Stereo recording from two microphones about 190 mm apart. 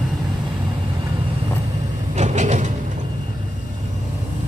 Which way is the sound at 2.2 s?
40° right (ahead or behind).